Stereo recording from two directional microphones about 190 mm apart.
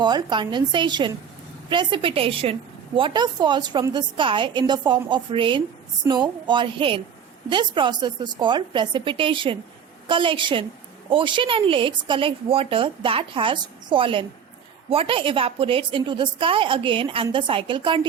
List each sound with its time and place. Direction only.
0.0 s a woman's voice: 25° right (ahead or behind)